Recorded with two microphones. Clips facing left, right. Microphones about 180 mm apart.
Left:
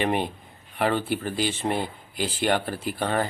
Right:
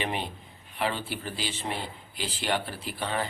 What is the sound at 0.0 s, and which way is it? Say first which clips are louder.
Speech: left 7 dB; 50° left (ahead or behind).